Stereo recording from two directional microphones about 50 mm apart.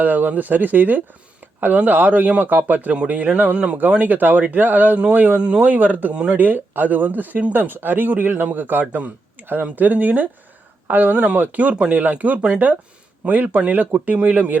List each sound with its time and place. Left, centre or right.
0.0 s a man's voice: right
3.8 s a man's voice: right